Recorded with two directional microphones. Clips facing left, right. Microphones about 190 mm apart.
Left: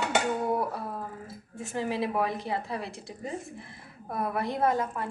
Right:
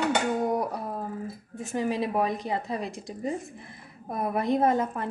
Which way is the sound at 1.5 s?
15° right (ahead or behind).